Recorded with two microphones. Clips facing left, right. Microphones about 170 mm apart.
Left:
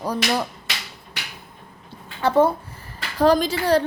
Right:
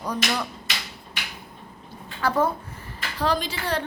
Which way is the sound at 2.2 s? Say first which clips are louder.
Left 6 dB; 30° left (ahead or behind).